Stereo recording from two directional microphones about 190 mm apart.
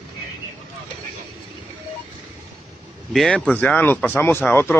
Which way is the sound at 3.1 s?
5° left (ahead or behind).